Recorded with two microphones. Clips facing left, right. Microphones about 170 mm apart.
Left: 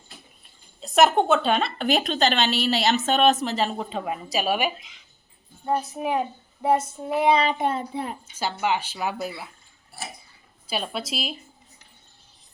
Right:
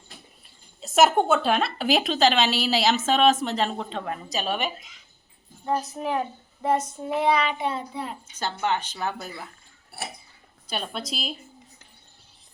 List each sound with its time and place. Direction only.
0.8 s a woman's voice: 5° right (ahead or behind)
7.4 s child singing: 50° left (ahead or behind)
8.4 s speech: 10° left (ahead or behind)
10.7 s a woman's voice: 5° left (ahead or behind)